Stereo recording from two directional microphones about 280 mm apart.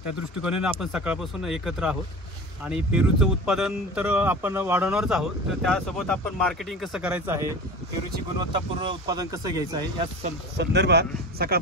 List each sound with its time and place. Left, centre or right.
0.4 s speech: centre
9.0 s speech: centre
10.6 s speech: right